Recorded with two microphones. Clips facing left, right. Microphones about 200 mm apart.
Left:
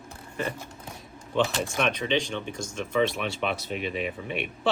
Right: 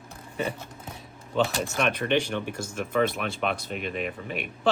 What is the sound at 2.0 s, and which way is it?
Speech, 65° right (ahead or behind).